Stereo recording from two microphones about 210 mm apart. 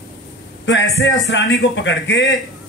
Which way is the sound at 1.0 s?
55° left (ahead or behind).